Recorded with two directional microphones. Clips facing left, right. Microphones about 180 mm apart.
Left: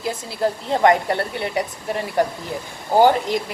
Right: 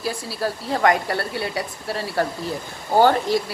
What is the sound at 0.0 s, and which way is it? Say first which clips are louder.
Speech: left 3 dB; 20° left (ahead or behind).